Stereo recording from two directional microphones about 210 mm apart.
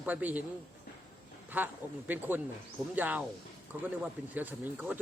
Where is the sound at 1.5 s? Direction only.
10° right (ahead or behind).